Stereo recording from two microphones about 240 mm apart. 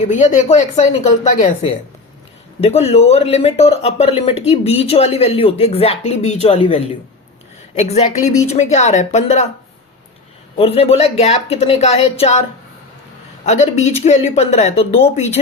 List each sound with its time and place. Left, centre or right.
0.1 s speech: left
10.6 s speech: left